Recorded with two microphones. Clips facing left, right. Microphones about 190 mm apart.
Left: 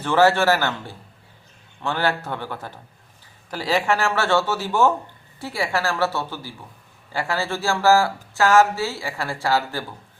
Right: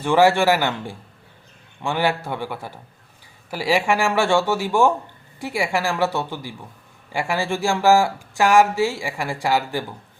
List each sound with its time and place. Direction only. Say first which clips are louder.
0.0 s speech: right 1 dB; 15° right (ahead or behind)